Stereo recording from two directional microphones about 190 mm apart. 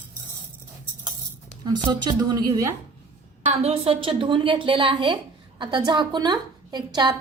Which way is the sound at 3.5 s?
30° right (ahead or behind).